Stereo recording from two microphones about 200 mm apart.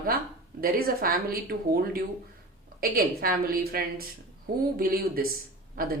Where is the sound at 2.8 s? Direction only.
50° right (ahead or behind).